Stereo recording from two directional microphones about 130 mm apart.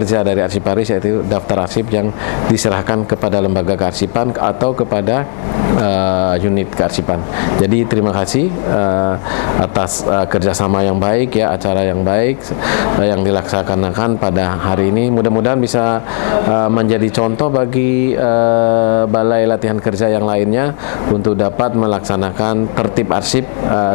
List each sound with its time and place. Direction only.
9.8 s speech: 25° left (ahead or behind)
14.0 s speech: 25° left (ahead or behind)
21.4 s speech: 25° left (ahead or behind)